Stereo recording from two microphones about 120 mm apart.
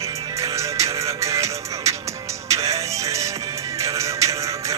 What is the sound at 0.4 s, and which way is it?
Music, 25° right (ahead or behind).